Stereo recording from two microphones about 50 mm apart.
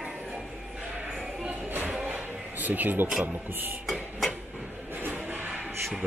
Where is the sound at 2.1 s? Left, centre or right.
Right.